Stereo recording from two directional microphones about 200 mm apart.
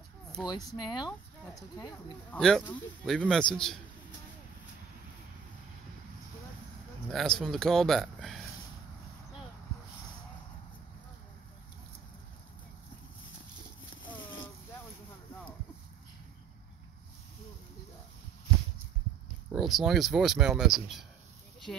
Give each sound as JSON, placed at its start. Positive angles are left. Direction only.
{"t": 0.4, "sound": "speech", "side_deg": 0}
{"t": 0.7, "sound": "speech", "side_deg": 20}
{"t": 2.3, "sound": "speech", "side_deg": 5}
{"t": 7.1, "sound": "speech", "side_deg": 0}
{"t": 19.5, "sound": "speech", "side_deg": 0}